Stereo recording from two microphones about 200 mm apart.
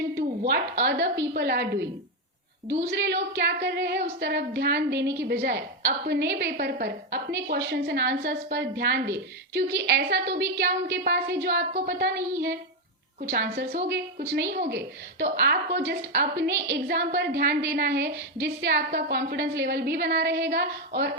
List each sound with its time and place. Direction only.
0.2 s a woman's voice: 50° right (ahead or behind)
13.3 s a woman's voice: 50° right (ahead or behind)